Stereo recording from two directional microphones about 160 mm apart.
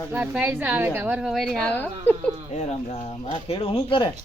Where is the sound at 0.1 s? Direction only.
10° right (ahead or behind); by 2.1 s 10° left (ahead or behind).